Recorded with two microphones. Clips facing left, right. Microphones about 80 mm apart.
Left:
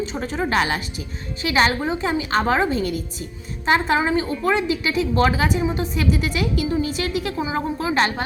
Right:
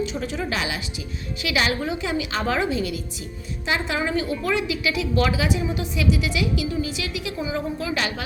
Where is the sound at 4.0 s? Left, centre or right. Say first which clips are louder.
Left 3 dB; left.